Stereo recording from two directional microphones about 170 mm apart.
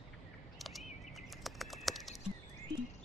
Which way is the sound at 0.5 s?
Centre (ahead or behind).